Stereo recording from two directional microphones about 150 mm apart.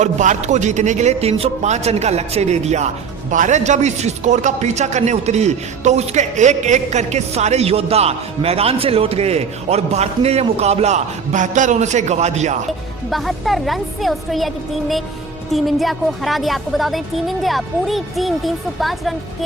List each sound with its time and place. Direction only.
0.0 s speech: 55° right (ahead or behind)
13.1 s speech: centre (ahead or behind)